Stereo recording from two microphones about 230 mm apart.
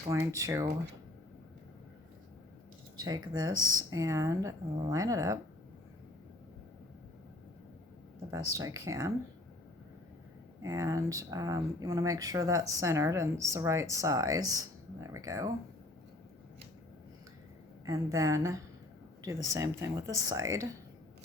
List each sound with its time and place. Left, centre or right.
0.1 s speech: centre
3.0 s speech: centre
8.3 s speech: centre
10.6 s speech: centre
17.8 s speech: centre